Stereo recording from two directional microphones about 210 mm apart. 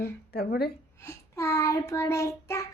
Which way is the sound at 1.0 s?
15° left (ahead or behind).